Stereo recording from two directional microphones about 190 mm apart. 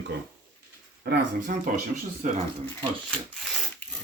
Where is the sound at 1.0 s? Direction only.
45° right (ahead or behind).